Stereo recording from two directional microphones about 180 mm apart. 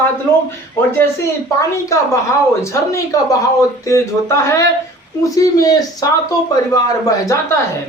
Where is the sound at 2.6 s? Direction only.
15° left (ahead or behind).